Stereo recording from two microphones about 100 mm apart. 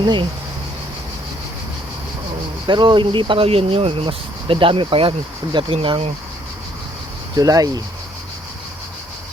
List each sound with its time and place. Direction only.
0.0 s speech: 50° right (ahead or behind)
2.6 s speech: 50° right (ahead or behind)
5.7 s speech: 70° right (ahead or behind)
7.3 s speech: 35° right (ahead or behind)